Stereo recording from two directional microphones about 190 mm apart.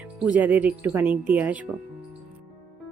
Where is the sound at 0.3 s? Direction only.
10° right (ahead or behind).